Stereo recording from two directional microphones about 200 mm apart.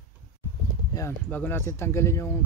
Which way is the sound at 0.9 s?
10° left (ahead or behind).